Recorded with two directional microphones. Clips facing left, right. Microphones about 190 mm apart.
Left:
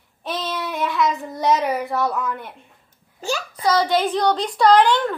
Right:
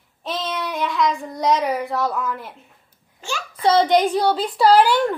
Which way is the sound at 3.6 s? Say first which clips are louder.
Right 3 dB; 25° right (ahead or behind).